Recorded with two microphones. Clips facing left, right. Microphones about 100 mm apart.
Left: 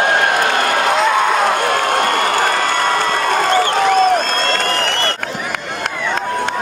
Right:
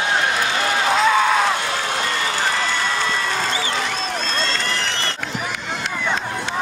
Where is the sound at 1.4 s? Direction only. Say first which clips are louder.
Left 6 dB; 55° left (ahead or behind).